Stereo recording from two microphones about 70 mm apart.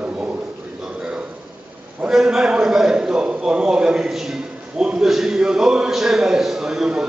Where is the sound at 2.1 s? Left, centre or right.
Centre.